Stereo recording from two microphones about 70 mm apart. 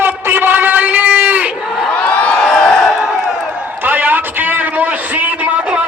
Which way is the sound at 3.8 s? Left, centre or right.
Right.